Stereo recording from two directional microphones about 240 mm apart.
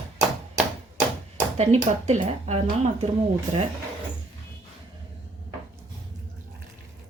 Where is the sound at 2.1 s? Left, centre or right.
Right.